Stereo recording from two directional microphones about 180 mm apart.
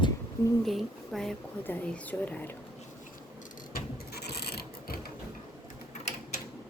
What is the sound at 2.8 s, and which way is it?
Filing, 45° left (ahead or behind).